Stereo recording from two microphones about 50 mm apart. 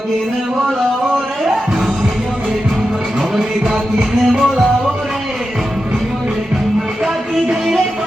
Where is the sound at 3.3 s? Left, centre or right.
Centre.